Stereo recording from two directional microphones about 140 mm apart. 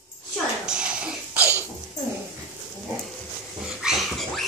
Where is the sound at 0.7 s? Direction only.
5° right (ahead or behind).